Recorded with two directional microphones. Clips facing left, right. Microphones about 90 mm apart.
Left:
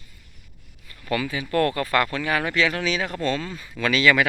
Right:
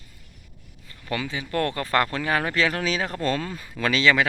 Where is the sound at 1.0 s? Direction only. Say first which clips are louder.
Left 3 dB; 20° right (ahead or behind).